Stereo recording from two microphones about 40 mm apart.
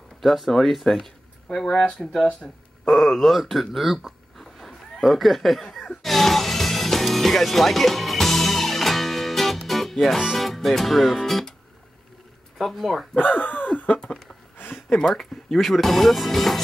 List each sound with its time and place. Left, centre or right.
0.2 s speech: centre
1.7 s speech: left
2.8 s speech: centre
6.0 s music: centre
10.2 s speech: centre
12.7 s speech: centre
13.2 s speech: left
14.1 s speech: centre